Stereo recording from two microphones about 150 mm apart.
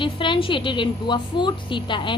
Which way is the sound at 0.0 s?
35° left (ahead or behind).